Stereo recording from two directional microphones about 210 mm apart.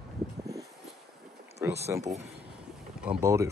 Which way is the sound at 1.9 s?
15° right (ahead or behind).